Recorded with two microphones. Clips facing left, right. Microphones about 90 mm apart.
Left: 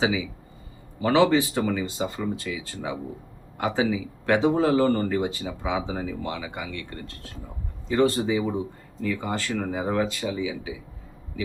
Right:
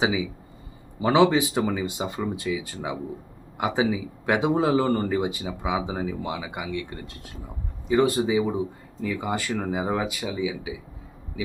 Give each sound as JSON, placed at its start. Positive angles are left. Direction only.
{"t": 1.0, "sound": "speech", "side_deg": -15}